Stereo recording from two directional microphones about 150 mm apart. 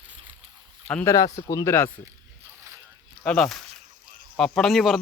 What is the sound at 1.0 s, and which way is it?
Speech, 20° left (ahead or behind).